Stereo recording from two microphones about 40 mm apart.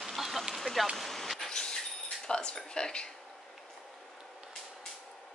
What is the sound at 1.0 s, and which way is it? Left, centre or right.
Vehicle, centre.